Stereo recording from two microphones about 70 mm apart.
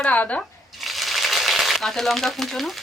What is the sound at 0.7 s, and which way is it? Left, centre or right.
Typewriter, centre.